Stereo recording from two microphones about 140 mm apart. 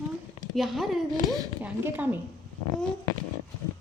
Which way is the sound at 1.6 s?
10° right (ahead or behind).